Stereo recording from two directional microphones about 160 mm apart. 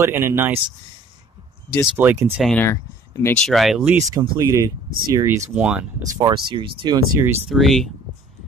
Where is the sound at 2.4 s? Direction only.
10° left (ahead or behind).